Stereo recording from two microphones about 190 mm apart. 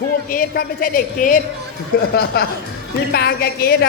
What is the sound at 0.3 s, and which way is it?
A woman's voice, 50° left (ahead or behind).